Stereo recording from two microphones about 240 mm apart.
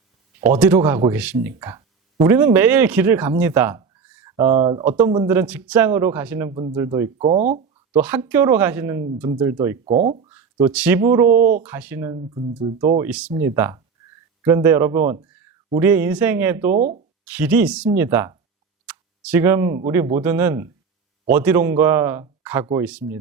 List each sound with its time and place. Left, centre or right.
0.3 s speech: centre
6.5 s speech: right
6.7 s speech: centre
7.3 s speech: right
7.9 s speech: centre
9.8 s speech: right
10.2 s speech: centre
11.3 s speech: right
11.6 s speech: centre
13.1 s speech: centre
15.1 s a sound: centre
15.7 s speech: centre
16.7 s speech: right
17.2 s speech: centre